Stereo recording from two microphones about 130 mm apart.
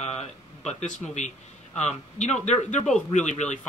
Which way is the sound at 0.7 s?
65° left (ahead or behind).